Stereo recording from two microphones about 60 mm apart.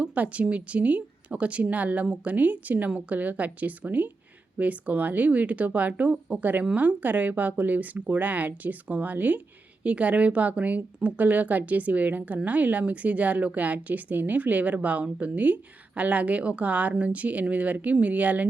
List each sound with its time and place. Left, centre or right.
0.0 s speech: right